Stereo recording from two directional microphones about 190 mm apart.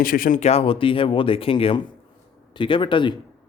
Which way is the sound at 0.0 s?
50° left (ahead or behind).